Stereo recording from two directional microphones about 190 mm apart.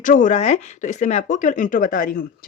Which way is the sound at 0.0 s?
40° left (ahead or behind).